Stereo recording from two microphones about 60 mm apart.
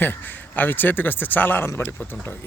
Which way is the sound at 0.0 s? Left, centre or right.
Left.